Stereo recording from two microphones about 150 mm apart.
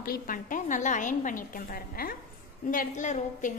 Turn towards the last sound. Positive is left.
turn(degrees=55)  # may be behind; listen again after turning